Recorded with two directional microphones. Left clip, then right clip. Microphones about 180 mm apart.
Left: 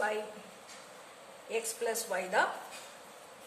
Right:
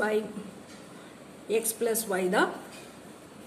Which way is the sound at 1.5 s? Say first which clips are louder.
Right 7 dB; 35° right (ahead or behind).